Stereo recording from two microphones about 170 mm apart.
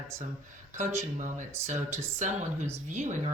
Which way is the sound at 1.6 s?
15° right (ahead or behind).